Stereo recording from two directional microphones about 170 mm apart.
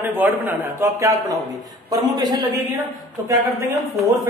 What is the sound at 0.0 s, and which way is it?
A man's voice, 10° right (ahead or behind).